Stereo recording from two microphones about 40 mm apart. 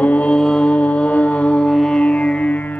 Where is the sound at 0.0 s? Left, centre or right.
Left.